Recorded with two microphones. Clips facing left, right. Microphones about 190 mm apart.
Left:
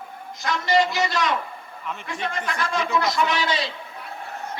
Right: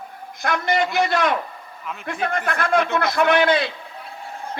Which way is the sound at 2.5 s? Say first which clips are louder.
Right 5 dB; 55° right (ahead or behind).